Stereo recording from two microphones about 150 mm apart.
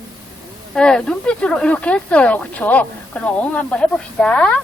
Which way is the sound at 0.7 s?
5° left (ahead or behind).